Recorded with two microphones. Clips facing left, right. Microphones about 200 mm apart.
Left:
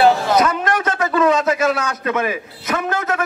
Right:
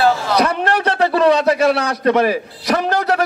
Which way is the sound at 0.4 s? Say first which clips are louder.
Right 1 dB; 35° right (ahead or behind).